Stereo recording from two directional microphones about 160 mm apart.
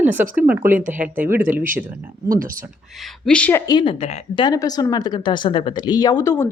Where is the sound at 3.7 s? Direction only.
25° left (ahead or behind).